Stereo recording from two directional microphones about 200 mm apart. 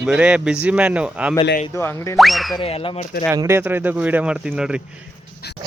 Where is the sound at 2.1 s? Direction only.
Centre (ahead or behind).